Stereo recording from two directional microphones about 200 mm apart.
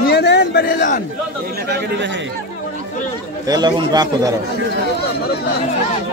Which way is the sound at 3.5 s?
20° right (ahead or behind).